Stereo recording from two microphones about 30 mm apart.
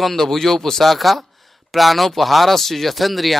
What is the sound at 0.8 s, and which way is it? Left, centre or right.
Speech, centre.